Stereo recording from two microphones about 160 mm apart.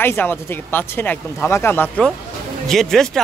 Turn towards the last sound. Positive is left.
turn(degrees=0)  # may be behind; listen again after turning